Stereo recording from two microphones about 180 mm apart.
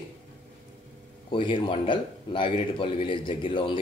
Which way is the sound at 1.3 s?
30° left (ahead or behind).